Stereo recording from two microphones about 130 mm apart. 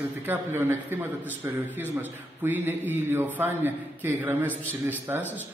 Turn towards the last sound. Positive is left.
turn(degrees=-15)  # may be behind; listen again after turning